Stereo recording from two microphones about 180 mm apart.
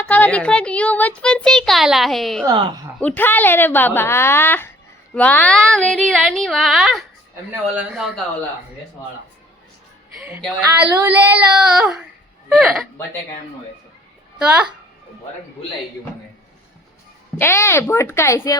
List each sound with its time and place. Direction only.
0.0 s a child's voice: 10° left (ahead or behind)
2.5 s a woman's voice: 25° right (ahead or behind)
3.0 s a woman's voice: 10° left (ahead or behind)
10.2 s a child's voice: 5° right (ahead or behind)
14.3 s a woman's voice: 5° right (ahead or behind)
17.3 s a woman's voice: 15° left (ahead or behind)